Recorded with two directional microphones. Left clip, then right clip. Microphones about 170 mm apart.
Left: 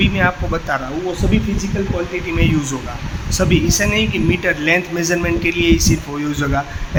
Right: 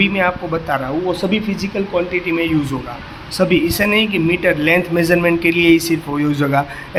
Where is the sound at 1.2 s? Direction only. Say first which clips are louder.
Right 1 dB; 25° right (ahead or behind).